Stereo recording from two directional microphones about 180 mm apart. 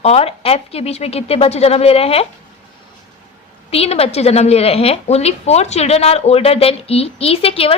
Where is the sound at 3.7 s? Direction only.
35° left (ahead or behind).